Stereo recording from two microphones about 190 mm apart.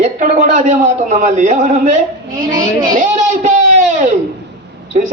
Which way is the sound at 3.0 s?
40° right (ahead or behind).